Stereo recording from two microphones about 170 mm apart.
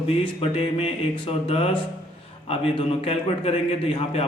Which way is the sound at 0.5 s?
35° left (ahead or behind).